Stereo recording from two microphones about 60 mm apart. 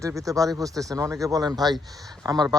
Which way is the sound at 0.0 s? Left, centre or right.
Right.